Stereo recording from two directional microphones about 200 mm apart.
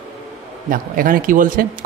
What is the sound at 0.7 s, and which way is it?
A man's voice, 45° right (ahead or behind).